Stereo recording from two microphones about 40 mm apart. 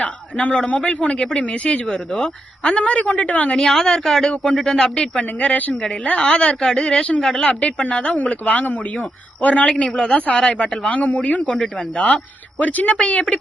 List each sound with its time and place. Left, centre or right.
0.0 s a sound: left
0.7 s a man's voice: left
1.9 s speech: centre
2.8 s a man's voice: left
3.7 s speech: centre
4.3 s speech: left
7.6 s speech: left
8.3 s a man's voice: left
9.9 s speech: left
10.2 s a man's voice: left
11.8 s speech: left
12.5 s a man's voice: left